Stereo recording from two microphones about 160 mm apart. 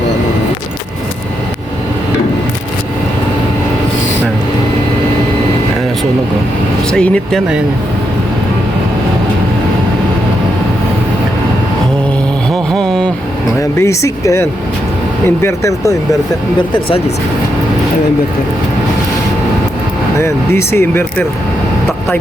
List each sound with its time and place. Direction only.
6.9 s speech: 5° left (ahead or behind)
12.7 s a sound: 5° left (ahead or behind)
13.6 s speech: 20° left (ahead or behind)
20.1 s speech: 15° left (ahead or behind)